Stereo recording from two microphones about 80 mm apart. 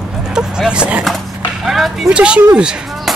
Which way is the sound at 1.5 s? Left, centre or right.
Centre.